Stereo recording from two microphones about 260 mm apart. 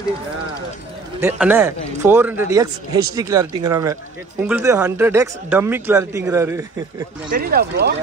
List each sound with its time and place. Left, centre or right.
1.2 s speech: centre
7.3 s speech: right